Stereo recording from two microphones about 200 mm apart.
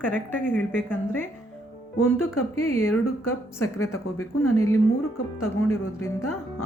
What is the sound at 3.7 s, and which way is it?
Speech, 90° left.